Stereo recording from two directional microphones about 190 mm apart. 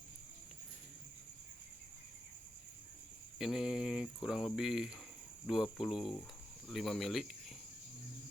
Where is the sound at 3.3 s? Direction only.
Centre (ahead or behind).